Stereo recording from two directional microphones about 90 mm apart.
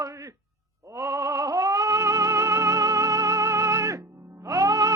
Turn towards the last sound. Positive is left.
turn(degrees=-40)  # may be behind; listen again after turning